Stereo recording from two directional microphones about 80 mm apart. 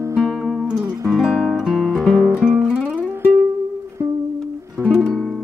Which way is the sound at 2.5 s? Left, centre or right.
Left.